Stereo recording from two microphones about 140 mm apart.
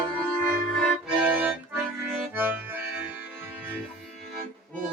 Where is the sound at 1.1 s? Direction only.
10° right (ahead or behind).